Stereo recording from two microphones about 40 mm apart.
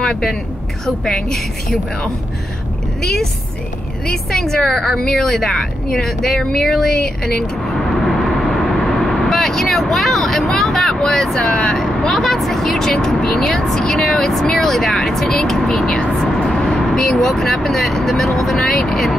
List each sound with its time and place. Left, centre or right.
0.8 s speech: centre
3.0 s a sound: centre
4.1 s speech: centre
8.1 s vehicle: centre
11.1 s speech: centre
11.3 s speech: left
11.7 s speech: centre
16.0 s vehicle: left
16.6 s vehicle: centre
17.0 s speech: centre